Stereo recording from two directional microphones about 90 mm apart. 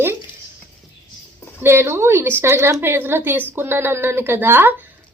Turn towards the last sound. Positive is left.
turn(degrees=-25)  # may be behind; listen again after turning